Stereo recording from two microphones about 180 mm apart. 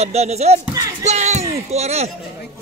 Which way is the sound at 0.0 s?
35° right (ahead or behind).